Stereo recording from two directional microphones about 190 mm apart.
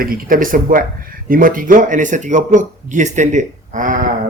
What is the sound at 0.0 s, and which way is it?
A man's voice, 50° right (ahead or behind).